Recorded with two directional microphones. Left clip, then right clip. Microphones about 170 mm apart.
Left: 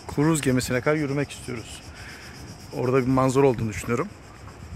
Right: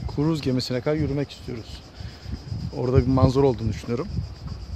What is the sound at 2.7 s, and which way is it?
Speech, 15° right (ahead or behind).